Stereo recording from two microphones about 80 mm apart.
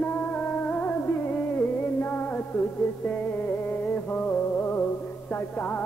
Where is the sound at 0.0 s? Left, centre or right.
Left.